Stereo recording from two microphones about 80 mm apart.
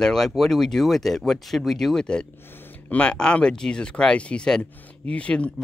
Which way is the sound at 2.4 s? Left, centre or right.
Left.